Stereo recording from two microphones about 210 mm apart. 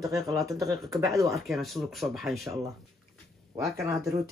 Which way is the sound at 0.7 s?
Centre (ahead or behind).